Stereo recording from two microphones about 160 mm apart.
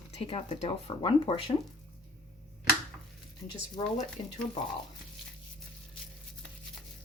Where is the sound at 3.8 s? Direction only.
25° left (ahead or behind).